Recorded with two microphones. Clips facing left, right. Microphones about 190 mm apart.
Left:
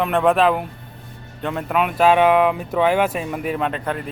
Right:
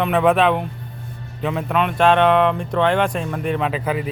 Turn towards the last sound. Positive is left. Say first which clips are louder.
# right 2 dB
turn(degrees=-5)  # may be behind; listen again after turning